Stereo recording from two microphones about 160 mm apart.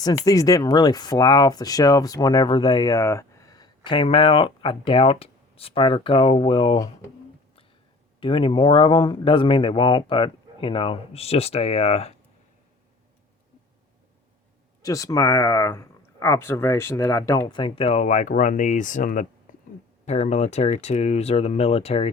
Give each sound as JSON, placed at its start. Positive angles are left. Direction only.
{"t": 0.0, "sound": "speech", "side_deg": 25}
{"t": 8.2, "sound": "speech", "side_deg": 30}
{"t": 14.8, "sound": "speech", "side_deg": 20}
{"t": 17.5, "sound": "speech", "side_deg": 35}